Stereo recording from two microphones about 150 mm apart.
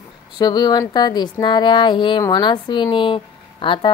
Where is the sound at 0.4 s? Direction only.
30° left (ahead or behind).